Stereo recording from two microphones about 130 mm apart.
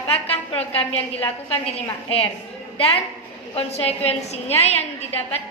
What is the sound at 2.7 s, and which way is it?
A woman's voice, 45° left (ahead or behind).